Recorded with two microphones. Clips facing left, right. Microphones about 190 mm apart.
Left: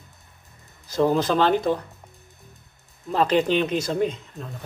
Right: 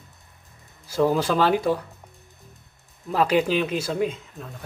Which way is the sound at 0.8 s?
10° right (ahead or behind).